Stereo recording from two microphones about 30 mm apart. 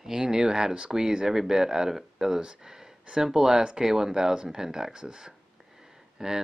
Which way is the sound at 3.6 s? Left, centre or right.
Right.